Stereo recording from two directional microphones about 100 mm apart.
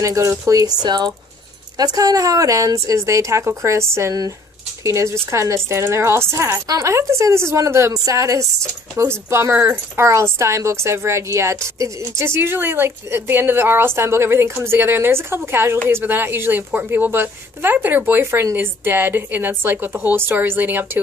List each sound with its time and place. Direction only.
0.0 s a woman's voice: 30° right (ahead or behind)
9.6 s speech: 20° right (ahead or behind)
10.0 s a woman's voice: 30° right (ahead or behind)